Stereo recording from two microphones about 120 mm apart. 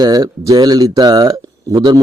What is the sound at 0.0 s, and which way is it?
A man's voice, 30° right (ahead or behind).